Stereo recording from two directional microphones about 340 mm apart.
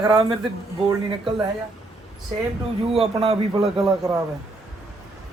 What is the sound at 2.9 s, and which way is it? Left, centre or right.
A man's voice, centre.